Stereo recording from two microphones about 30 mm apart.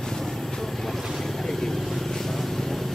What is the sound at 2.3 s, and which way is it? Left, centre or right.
Vehicle, centre.